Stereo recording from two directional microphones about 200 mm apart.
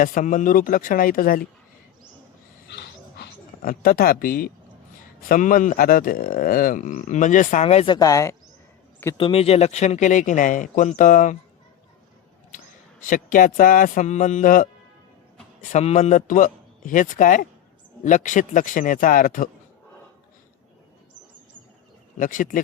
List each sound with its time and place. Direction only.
0.0 s speech: 40° left (ahead or behind)
2.7 s a sound: 55° left (ahead or behind)
5.3 s speech: 45° left (ahead or behind)
7.9 s speech: 15° left (ahead or behind)
9.1 s speech: 30° left (ahead or behind)
13.1 s speech: 40° left (ahead or behind)
15.7 s speech: 35° left (ahead or behind)
22.2 s speech: 40° left (ahead or behind)